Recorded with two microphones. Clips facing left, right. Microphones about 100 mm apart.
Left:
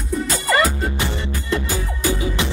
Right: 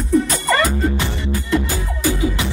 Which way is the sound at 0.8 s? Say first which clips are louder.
Right 3 dB; 20° left (ahead or behind).